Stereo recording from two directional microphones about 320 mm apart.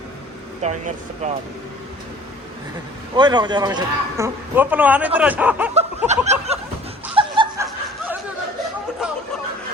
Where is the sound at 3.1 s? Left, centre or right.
Centre.